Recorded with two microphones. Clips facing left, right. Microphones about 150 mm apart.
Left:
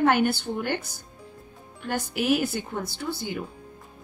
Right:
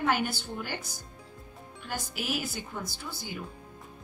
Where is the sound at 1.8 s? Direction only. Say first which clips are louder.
Left 9 dB; 60° left (ahead or behind).